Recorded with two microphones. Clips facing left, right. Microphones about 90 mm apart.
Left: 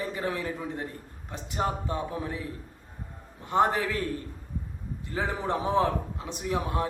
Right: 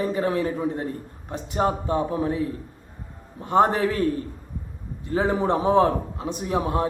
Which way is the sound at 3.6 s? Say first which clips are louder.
Right 5 dB; 35° right (ahead or behind).